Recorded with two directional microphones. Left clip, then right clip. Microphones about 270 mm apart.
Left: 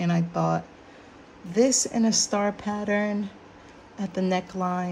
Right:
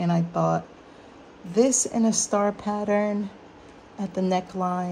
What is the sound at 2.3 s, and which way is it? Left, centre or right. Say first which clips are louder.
Speech: right 2 dB; centre.